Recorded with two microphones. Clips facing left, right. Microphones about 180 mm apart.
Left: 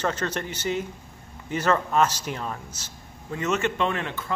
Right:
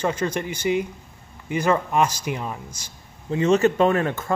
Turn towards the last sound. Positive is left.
turn(degrees=-45)  # may be behind; listen again after turning